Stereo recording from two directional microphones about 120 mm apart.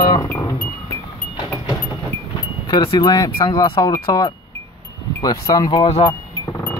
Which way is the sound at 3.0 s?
35° left (ahead or behind).